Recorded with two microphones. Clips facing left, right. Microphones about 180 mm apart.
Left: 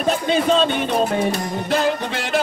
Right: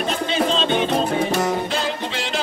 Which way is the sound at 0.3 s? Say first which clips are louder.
Left 4 dB; 50° left (ahead or behind).